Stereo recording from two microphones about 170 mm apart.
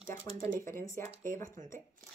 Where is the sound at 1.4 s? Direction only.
50° right (ahead or behind).